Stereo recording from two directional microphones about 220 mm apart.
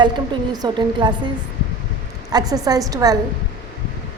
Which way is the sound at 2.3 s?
15° right (ahead or behind).